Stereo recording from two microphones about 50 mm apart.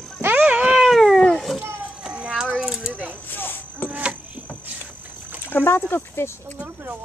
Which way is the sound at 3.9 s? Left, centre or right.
Right.